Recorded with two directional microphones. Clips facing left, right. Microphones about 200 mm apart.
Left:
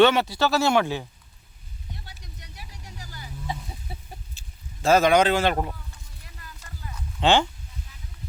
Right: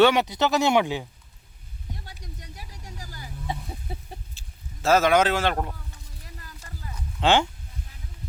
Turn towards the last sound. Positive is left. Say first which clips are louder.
# left 1 dB
turn(degrees=-5)  # may be behind; listen again after turning